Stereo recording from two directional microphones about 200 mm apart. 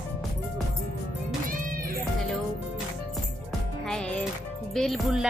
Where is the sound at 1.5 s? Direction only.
45° right (ahead or behind).